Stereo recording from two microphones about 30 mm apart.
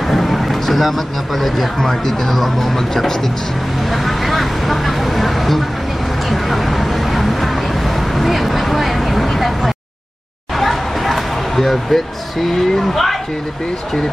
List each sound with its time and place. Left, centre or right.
0.0 s speech: centre
3.8 s vehicle: centre
10.5 s a sound: centre